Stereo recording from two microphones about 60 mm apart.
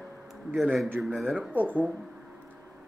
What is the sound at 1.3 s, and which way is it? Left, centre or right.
Speech, right.